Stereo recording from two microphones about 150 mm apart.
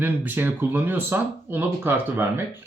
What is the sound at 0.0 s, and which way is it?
Speech, 10° right (ahead or behind).